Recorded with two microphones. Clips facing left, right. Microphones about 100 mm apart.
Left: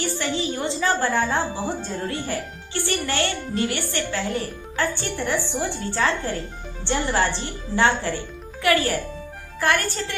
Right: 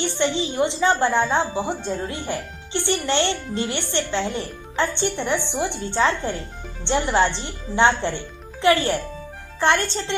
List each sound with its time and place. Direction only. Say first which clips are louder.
0.0 s a woman's voice: right 3 dB; 20° right (ahead or behind)